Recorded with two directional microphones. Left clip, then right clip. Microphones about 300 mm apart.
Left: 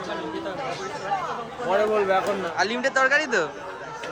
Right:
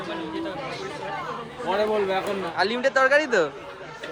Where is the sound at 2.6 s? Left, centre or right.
Centre.